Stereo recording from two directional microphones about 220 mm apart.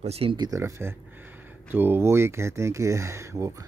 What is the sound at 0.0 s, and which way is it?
Speech, 25° right (ahead or behind).